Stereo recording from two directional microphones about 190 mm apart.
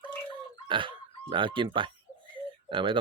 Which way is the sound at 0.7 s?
25° right (ahead or behind).